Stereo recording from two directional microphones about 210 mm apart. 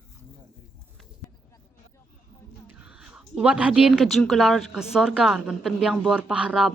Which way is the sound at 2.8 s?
5° right (ahead or behind).